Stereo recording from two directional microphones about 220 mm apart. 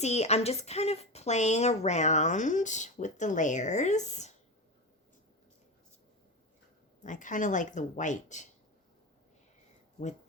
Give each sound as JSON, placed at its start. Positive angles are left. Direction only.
{"t": 0.0, "sound": "a woman's voice", "side_deg": 30}
{"t": 7.0, "sound": "a woman's voice", "side_deg": 35}